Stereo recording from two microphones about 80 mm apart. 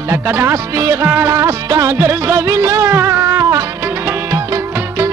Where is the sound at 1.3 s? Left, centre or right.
Right.